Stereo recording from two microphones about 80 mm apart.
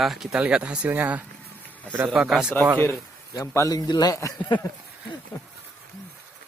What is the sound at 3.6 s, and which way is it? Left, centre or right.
Speech, left.